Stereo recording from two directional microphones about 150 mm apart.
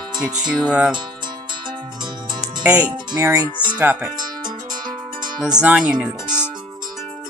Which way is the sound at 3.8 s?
10° right (ahead or behind).